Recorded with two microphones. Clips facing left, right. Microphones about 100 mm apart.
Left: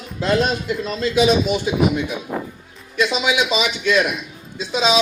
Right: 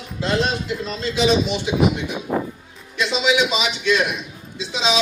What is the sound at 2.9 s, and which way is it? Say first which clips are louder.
A man's voice: even; 50° left (ahead or behind).